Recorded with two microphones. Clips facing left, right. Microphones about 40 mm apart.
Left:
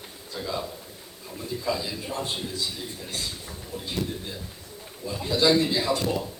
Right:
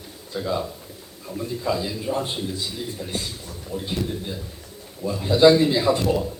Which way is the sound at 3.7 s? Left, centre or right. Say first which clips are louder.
Right 4 dB; centre.